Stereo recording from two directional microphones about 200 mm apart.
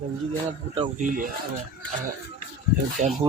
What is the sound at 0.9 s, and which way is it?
Speech, 40° right (ahead or behind).